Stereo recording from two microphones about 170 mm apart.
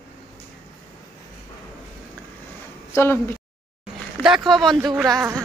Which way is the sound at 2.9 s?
15° left (ahead or behind).